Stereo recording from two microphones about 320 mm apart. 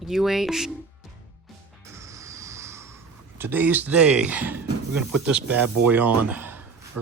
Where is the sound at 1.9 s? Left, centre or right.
Centre.